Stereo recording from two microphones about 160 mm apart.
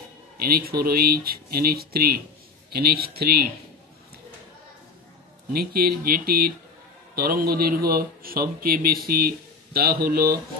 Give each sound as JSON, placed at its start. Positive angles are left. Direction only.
{"t": 0.4, "sound": "speech", "side_deg": -70}
{"t": 5.5, "sound": "speech", "side_deg": -70}